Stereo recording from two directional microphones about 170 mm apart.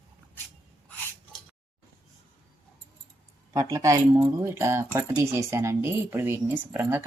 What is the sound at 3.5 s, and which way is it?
Speech, 20° right (ahead or behind).